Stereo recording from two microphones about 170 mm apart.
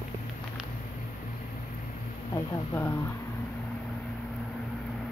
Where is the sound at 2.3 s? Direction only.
15° left (ahead or behind).